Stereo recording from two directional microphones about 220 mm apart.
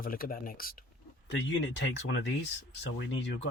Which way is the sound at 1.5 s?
55° left (ahead or behind).